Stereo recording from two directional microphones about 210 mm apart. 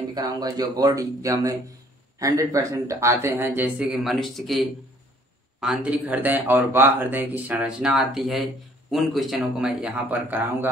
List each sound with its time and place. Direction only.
0.1 s a man's voice: 20° right (ahead or behind)